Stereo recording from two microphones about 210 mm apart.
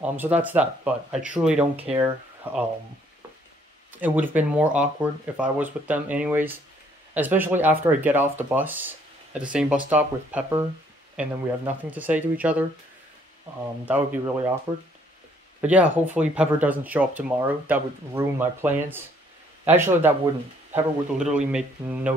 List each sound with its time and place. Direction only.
0.0 s speech: 10° right (ahead or behind)
2.0 s speech: 15° right (ahead or behind)
3.9 s speech: 10° right (ahead or behind)
13.8 s speech: 10° right (ahead or behind)
15.6 s speech: 5° right (ahead or behind)